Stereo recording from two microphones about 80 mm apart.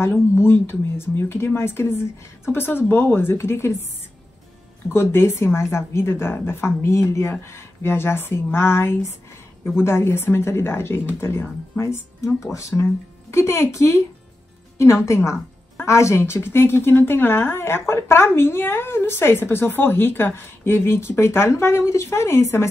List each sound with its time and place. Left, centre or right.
0.0 s a woman's voice: left
4.8 s a woman's voice: left